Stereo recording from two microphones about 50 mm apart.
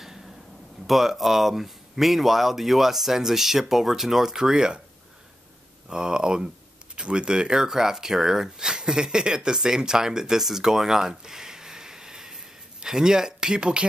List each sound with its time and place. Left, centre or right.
0.8 s speech: centre
5.9 s speech: centre